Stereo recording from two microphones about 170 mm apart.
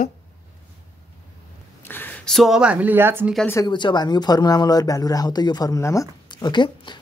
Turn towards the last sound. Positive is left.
turn(degrees=25)  # may be behind; listen again after turning